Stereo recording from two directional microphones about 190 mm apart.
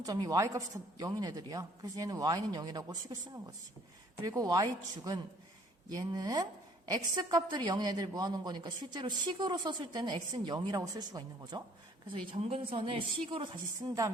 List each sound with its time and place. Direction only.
0.0 s a woman's voice: 20° right (ahead or behind)